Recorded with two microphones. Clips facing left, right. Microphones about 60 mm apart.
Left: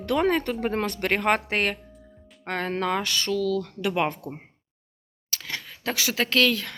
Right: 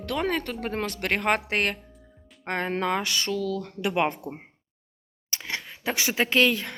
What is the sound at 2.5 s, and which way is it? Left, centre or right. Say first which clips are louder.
Speech: even; centre.